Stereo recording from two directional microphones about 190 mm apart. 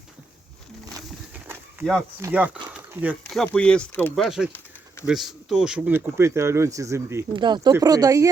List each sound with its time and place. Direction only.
1.8 s speech: 10° right (ahead or behind)
3.4 s speech: 5° left (ahead or behind); by 8.3 s 15° right (ahead or behind)